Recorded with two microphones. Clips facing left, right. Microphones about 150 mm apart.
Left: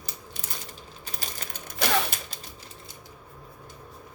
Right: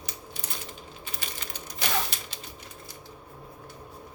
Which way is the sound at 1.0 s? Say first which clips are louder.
Left 2 dB; 40° left (ahead or behind).